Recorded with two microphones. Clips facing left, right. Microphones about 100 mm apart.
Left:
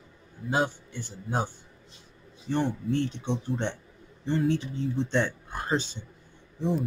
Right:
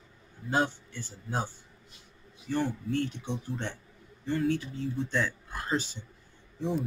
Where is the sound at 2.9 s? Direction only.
25° left (ahead or behind).